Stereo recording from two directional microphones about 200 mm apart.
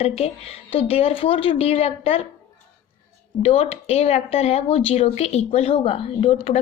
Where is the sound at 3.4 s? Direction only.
30° left (ahead or behind).